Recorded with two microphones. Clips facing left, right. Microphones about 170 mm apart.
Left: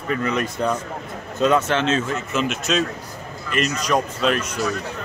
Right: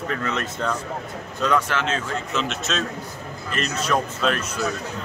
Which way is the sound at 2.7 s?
10° left (ahead or behind).